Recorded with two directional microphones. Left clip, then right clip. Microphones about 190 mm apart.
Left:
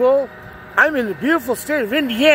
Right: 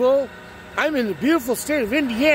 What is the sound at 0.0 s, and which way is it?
Speech, 15° right (ahead or behind).